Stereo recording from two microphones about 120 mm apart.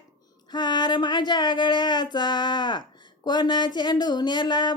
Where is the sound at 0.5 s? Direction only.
40° left (ahead or behind).